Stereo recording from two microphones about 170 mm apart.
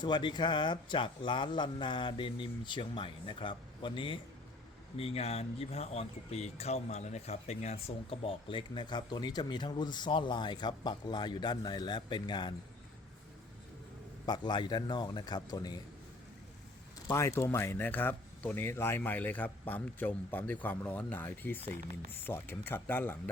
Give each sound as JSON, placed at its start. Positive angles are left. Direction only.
{"t": 0.0, "sound": "speech", "side_deg": 25}
{"t": 14.3, "sound": "speech", "side_deg": 25}
{"t": 17.1, "sound": "speech", "side_deg": 15}